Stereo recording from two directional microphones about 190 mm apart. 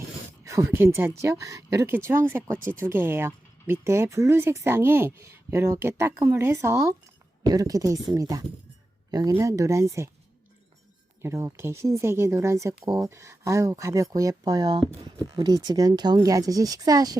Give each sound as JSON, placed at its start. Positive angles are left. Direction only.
{"t": 0.4, "sound": "speech", "side_deg": -15}
{"t": 11.2, "sound": "speech", "side_deg": -15}